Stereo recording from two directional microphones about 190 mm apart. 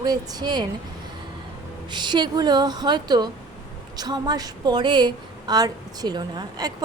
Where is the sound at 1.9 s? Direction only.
25° right (ahead or behind).